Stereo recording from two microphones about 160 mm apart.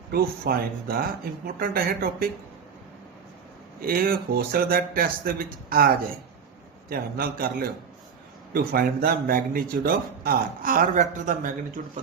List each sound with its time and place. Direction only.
0.1 s speech: 75° right (ahead or behind)
3.8 s speech: 65° right (ahead or behind)
6.9 s speech: 65° right (ahead or behind)